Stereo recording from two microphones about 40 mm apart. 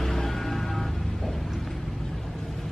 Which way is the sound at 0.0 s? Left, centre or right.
Centre.